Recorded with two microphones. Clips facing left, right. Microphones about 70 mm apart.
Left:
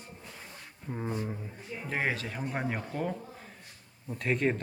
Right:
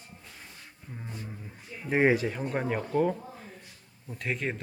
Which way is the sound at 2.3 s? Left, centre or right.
Centre.